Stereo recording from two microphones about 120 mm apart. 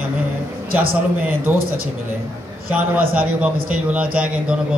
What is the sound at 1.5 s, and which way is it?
Speech, 15° right (ahead or behind).